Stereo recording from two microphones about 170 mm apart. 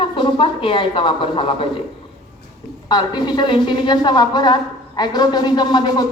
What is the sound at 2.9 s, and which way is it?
A man's voice, 25° left (ahead or behind).